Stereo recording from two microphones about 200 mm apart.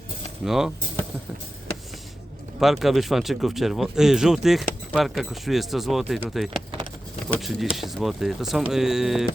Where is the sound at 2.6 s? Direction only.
Centre (ahead or behind).